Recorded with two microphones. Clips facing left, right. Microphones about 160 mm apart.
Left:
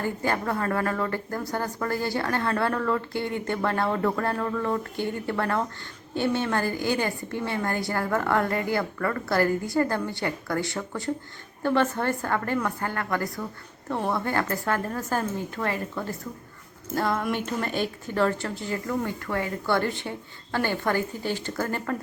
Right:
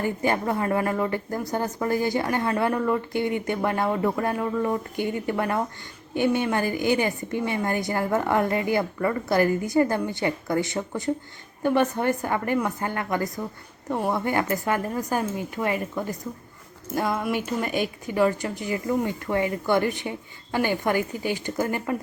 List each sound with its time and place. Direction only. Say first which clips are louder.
0.0 s a woman's voice: right 3 dB; 15° right (ahead or behind)